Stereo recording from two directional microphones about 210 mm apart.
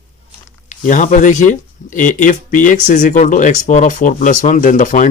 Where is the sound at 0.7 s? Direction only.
35° left (ahead or behind).